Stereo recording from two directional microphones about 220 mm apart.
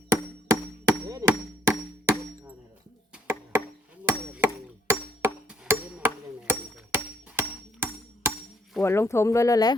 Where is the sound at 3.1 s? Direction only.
10° right (ahead or behind).